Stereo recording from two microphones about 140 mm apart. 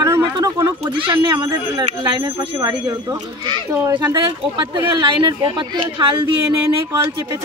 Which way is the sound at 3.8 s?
30° right (ahead or behind).